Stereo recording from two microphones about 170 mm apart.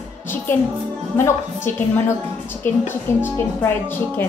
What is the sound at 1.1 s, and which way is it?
Speech, 15° left (ahead or behind).